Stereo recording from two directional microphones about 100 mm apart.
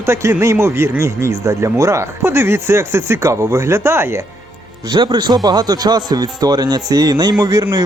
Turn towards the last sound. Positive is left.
turn(degrees=-35)  # may be behind; listen again after turning